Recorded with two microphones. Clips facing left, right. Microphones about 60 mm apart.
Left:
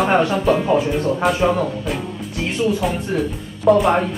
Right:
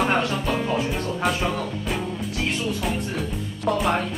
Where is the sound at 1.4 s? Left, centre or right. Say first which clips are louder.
Left 8 dB; centre.